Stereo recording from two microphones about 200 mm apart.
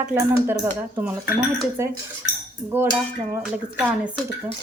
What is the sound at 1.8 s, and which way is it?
Speech, 10° right (ahead or behind).